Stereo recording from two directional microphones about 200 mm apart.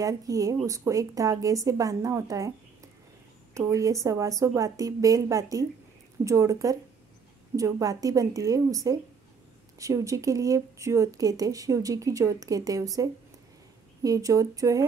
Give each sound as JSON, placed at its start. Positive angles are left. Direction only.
{"t": 0.0, "sound": "speech", "side_deg": -15}
{"t": 3.5, "sound": "speech", "side_deg": -15}